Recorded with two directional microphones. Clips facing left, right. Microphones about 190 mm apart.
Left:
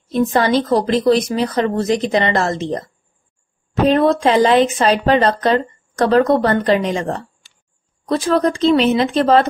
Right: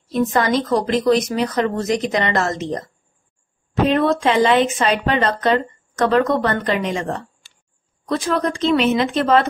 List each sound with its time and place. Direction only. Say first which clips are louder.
0.1 s speech: left 3 dB; 30° left (ahead or behind)
3.8 s speech: left 3 dB; 35° left (ahead or behind)